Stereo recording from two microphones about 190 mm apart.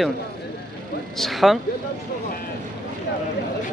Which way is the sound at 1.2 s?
Centre (ahead or behind).